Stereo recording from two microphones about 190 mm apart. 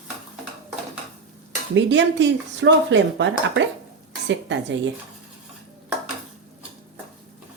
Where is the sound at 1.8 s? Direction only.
70° right (ahead or behind).